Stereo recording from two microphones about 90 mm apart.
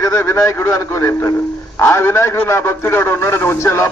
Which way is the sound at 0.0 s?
30° left (ahead or behind).